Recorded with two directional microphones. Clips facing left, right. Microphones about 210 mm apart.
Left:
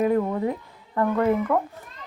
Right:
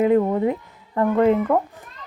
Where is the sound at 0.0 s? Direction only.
25° right (ahead or behind).